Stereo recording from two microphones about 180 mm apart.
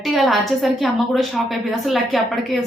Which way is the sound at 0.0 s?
Centre (ahead or behind).